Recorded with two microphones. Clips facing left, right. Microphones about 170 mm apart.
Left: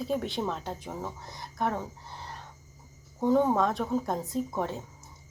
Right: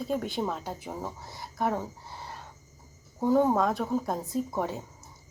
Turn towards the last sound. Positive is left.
turn(degrees=-5)  # may be behind; listen again after turning